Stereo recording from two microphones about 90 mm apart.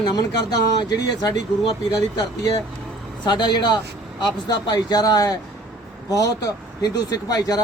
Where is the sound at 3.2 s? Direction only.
55° left (ahead or behind).